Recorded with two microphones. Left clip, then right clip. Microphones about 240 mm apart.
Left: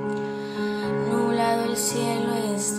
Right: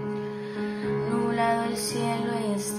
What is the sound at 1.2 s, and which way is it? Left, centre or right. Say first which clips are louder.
Music: left 2 dB; centre.